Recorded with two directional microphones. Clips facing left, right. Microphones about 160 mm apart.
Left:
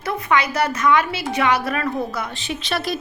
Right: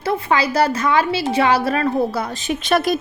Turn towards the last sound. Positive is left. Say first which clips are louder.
# right 7 dB
turn(degrees=-50)  # may be behind; listen again after turning